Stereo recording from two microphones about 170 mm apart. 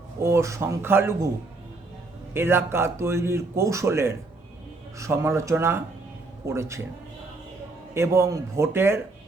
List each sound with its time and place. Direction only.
0.2 s a man's voice: 15° right (ahead or behind)
2.3 s a man's voice: 15° right (ahead or behind)
7.9 s a man's voice: 15° right (ahead or behind)